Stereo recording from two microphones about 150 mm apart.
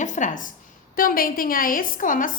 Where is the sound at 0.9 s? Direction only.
70° left (ahead or behind).